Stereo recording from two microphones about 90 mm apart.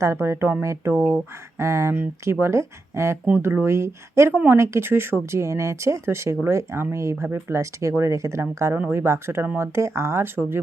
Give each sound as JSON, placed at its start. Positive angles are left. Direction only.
{"t": 0.0, "sound": "speech", "side_deg": -30}